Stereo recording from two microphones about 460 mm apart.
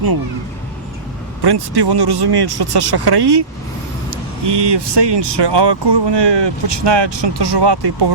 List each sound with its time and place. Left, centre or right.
1.4 s speech: right